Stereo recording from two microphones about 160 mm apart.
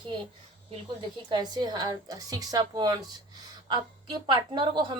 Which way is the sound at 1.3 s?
25° right (ahead or behind).